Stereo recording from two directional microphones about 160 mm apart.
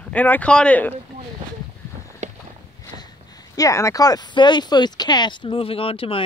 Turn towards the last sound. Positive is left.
turn(degrees=35)  # may be behind; listen again after turning